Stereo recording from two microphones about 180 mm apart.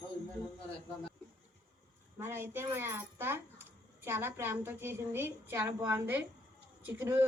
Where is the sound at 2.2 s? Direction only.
10° right (ahead or behind).